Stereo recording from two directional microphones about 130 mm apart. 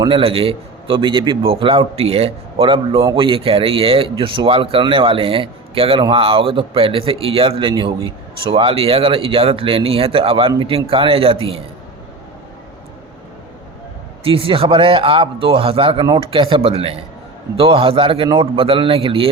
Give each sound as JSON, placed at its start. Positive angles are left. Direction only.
{"t": 0.1, "sound": "a man's voice", "side_deg": -45}
{"t": 14.3, "sound": "speech", "side_deg": -45}